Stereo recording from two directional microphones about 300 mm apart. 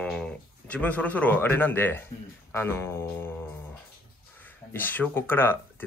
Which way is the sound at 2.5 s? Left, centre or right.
Centre.